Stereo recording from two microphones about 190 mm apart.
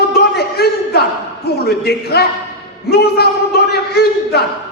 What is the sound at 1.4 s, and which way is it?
A man's voice, 55° left (ahead or behind).